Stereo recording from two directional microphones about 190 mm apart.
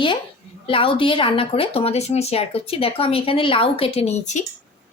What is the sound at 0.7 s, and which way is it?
Speech, 30° left (ahead or behind).